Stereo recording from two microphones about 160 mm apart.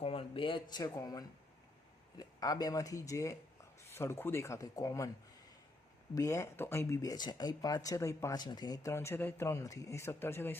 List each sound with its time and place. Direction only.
0.0 s speech: 35° left (ahead or behind)
6.1 s speech: 15° left (ahead or behind)